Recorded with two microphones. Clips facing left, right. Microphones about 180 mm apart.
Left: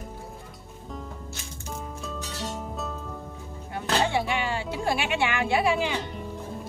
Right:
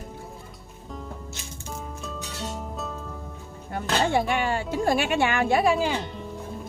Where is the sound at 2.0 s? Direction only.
Centre (ahead or behind).